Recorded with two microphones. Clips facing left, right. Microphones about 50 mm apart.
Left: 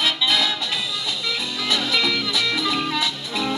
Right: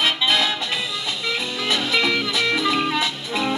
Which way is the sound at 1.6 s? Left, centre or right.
Centre.